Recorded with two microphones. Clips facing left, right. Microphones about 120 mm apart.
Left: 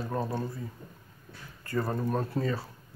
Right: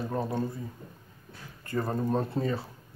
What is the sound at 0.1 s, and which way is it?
Speech, 15° right (ahead or behind).